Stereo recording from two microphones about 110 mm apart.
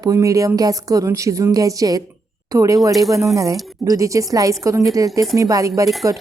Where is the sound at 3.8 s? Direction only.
30° right (ahead or behind).